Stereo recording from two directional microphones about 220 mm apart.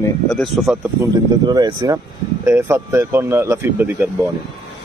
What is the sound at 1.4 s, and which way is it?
Speech, 15° right (ahead or behind).